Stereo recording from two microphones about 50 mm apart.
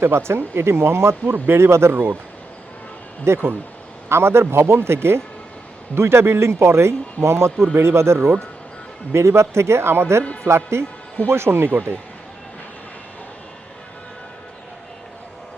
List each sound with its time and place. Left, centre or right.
0.0 s speech: right
3.2 s speech: right